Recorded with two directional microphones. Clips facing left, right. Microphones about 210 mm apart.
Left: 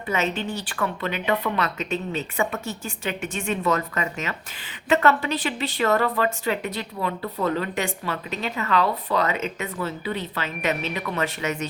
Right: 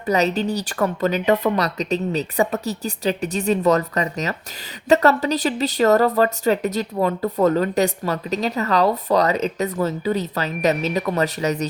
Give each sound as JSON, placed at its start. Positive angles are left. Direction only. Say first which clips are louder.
{"t": 0.0, "sound": "a woman's voice", "louder": "right 6 dB", "side_deg": -40}